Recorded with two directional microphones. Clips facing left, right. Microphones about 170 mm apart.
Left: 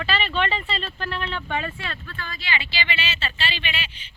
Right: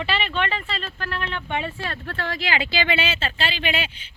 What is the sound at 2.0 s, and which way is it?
Speech, 70° right (ahead or behind).